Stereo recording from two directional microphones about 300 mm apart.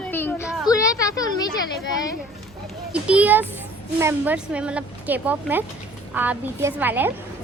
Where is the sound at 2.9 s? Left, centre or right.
Centre.